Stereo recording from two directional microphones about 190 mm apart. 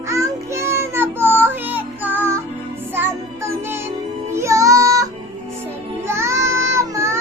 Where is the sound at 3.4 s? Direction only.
15° right (ahead or behind).